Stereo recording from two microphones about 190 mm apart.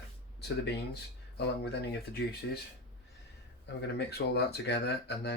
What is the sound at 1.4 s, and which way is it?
Speech, 60° left (ahead or behind).